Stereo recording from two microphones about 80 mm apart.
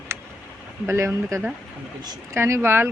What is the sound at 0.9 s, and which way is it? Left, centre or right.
Speech, right.